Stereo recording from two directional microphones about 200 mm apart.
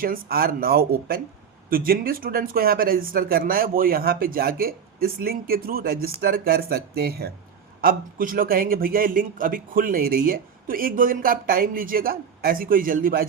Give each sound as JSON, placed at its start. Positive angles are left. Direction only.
{"t": 0.0, "sound": "speech", "side_deg": -45}